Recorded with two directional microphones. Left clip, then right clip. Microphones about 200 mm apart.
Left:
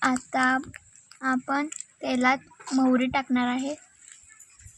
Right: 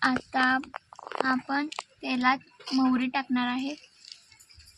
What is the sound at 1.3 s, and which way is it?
Speech, 50° left (ahead or behind).